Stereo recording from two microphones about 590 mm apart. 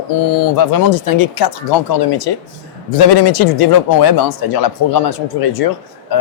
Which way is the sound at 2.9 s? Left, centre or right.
Left.